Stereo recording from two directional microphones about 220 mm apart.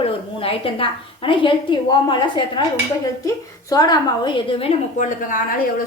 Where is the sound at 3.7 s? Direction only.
20° left (ahead or behind).